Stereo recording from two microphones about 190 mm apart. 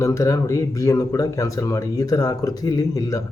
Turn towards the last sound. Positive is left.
turn(degrees=15)  # may be behind; listen again after turning